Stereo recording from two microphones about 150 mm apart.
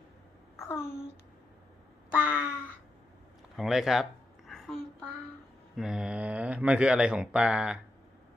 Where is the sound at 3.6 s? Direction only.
Centre (ahead or behind).